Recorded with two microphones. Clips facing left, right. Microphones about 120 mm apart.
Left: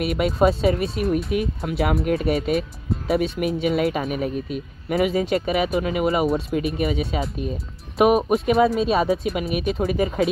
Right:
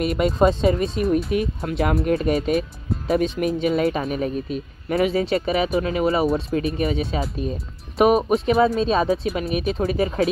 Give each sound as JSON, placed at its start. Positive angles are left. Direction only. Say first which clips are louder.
{"t": 0.0, "sound": "speech", "louder": "right 1 dB", "side_deg": 5}